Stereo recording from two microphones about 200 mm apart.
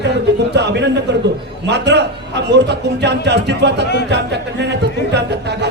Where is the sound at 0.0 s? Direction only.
60° right (ahead or behind).